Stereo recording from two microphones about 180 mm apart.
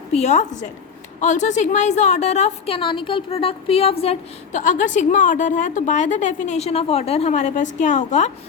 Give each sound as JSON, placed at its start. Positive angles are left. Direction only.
{"t": 0.1, "sound": "a woman's voice", "side_deg": 40}